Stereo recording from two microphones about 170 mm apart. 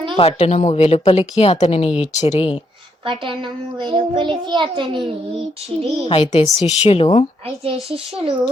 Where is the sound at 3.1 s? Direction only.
30° right (ahead or behind).